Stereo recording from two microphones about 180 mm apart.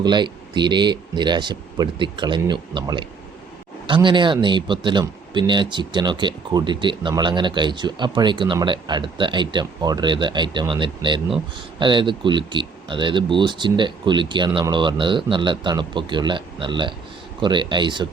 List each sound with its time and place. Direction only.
0.0 s speech: 25° right (ahead or behind)